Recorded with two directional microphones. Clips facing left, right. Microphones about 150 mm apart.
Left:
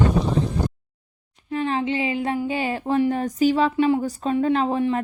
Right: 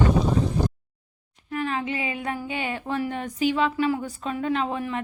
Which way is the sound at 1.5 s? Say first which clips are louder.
Left 4 dB; 30° left (ahead or behind).